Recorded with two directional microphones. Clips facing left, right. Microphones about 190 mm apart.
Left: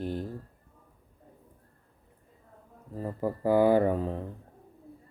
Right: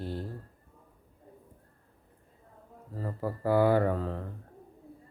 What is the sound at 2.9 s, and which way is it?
Speech, 15° left (ahead or behind).